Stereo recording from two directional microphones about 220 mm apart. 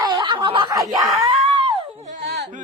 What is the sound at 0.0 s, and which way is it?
Snicker, 20° right (ahead or behind).